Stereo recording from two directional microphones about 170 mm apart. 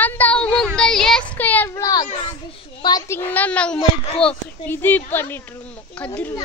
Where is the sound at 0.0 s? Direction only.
10° left (ahead or behind).